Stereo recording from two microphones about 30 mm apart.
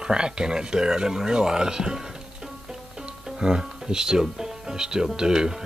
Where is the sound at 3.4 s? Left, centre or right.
Right.